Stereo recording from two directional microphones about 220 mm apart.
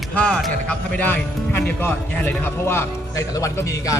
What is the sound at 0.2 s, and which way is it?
Speech, 5° left (ahead or behind).